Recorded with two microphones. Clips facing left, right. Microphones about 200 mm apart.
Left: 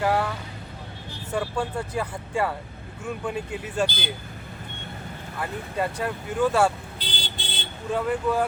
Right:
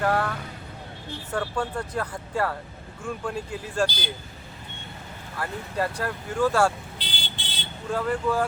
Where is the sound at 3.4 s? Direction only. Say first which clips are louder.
Left 1 dB; 65° left (ahead or behind).